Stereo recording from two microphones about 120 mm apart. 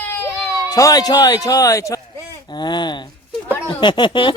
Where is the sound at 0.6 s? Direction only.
30° left (ahead or behind).